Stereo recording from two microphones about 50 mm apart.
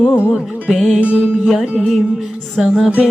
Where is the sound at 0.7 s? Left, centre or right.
Centre.